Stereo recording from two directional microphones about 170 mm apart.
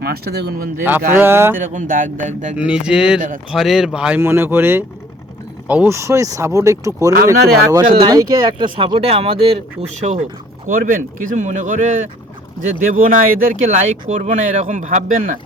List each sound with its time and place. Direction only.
0.0 s speech: 70° right (ahead or behind)
0.9 s speech: 10° right (ahead or behind)
1.5 s speech: 50° right (ahead or behind)
2.6 s speech: 5° right (ahead or behind)
3.2 s speech: 50° right (ahead or behind)
3.5 s speech: centre (ahead or behind); by 10.2 s 40° right (ahead or behind)
10.7 s speech: 55° right (ahead or behind)